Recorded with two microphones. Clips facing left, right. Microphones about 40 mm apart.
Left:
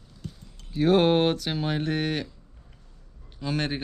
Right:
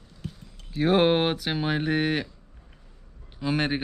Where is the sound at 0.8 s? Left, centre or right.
Centre.